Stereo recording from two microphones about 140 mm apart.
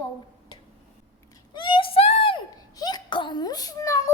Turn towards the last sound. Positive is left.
turn(degrees=25)  # may be behind; listen again after turning